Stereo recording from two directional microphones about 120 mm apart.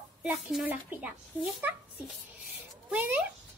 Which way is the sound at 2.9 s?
15° right (ahead or behind).